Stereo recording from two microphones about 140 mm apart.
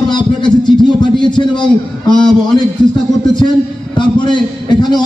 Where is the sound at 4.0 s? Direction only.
35° left (ahead or behind).